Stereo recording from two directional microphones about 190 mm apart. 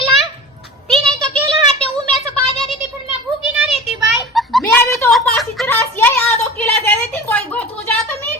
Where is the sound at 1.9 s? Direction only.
30° left (ahead or behind).